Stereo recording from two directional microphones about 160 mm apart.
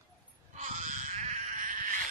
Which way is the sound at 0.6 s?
50° right (ahead or behind).